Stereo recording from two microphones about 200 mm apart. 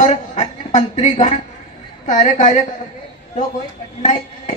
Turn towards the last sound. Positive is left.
turn(degrees=35)  # may be behind; listen again after turning